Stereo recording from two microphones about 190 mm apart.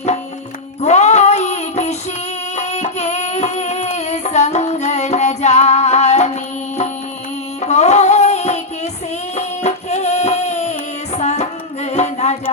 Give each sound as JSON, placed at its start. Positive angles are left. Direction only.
{"t": 0.8, "sound": "music", "side_deg": 35}
{"t": 2.6, "sound": "child singing", "side_deg": 35}
{"t": 7.6, "sound": "music", "side_deg": 35}